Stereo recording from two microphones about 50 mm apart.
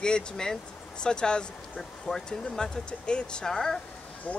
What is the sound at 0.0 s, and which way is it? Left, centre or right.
Speech, centre.